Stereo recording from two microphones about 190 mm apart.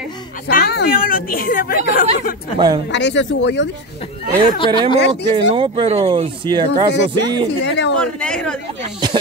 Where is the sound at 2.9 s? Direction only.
65° left (ahead or behind).